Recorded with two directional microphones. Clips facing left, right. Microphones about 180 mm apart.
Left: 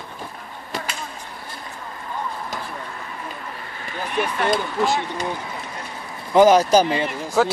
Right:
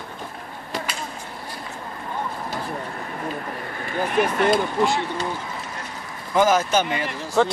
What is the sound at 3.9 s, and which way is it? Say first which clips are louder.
Speech: right 4 dB; 45° right (ahead or behind).